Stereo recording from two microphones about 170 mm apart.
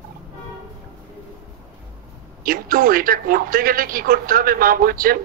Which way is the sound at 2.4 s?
55° right (ahead or behind).